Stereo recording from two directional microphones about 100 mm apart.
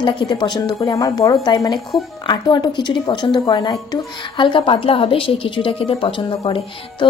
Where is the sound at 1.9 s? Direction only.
Centre (ahead or behind).